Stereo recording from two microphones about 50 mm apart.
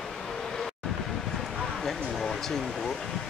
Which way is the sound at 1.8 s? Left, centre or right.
Centre.